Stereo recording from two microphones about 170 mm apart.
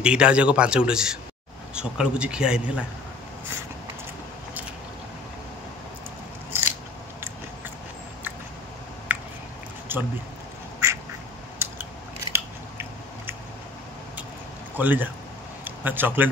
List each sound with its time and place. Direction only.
0.0 s speech: 5° right (ahead or behind)
9.9 s speech: 10° right (ahead or behind)
10.8 s duck: 15° right (ahead or behind)
11.5 s scissors: 15° right (ahead or behind)
14.8 s speech: 10° right (ahead or behind)